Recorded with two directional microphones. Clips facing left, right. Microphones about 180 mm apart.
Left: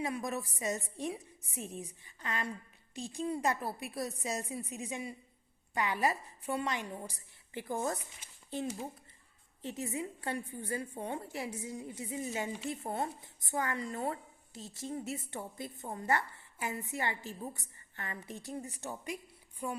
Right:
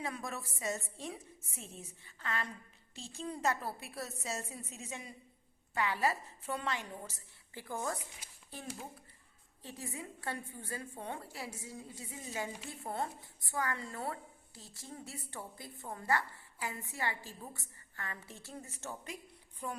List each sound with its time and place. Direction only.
0.0 s a woman's voice: 15° left (ahead or behind)
9.6 s a woman's voice: 20° left (ahead or behind)